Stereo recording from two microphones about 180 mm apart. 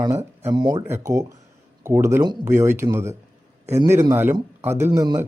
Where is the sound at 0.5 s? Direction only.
25° right (ahead or behind).